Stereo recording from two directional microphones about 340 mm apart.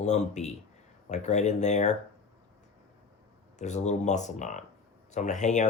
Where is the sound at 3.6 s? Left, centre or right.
Left.